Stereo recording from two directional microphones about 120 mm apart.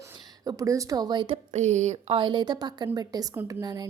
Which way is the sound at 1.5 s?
75° right (ahead or behind).